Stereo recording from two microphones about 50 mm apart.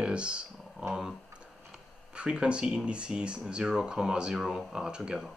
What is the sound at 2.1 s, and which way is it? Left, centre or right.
Speech, centre.